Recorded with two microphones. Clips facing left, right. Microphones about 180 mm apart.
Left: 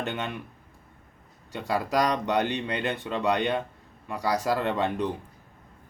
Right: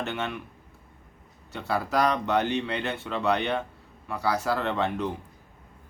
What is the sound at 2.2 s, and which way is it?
Speech, 15° left (ahead or behind).